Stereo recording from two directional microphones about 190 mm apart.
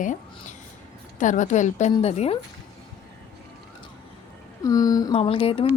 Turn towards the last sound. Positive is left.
turn(degrees=30)  # may be behind; listen again after turning